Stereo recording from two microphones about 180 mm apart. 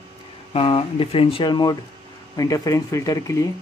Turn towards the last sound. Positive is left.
turn(degrees=20)  # may be behind; listen again after turning